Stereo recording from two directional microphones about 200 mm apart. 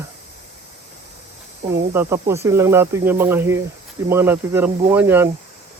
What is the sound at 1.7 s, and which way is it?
Speech, 10° right (ahead or behind).